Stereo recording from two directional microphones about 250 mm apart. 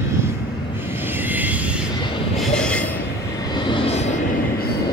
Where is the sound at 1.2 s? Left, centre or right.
Centre.